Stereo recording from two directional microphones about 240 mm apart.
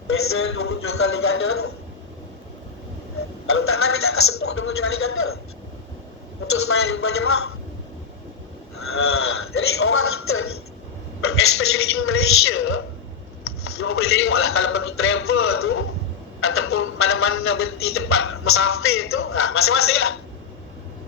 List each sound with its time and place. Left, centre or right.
0.1 s a man's voice: left
3.4 s a man's voice: left
6.5 s a man's voice: left
8.7 s a man's voice: left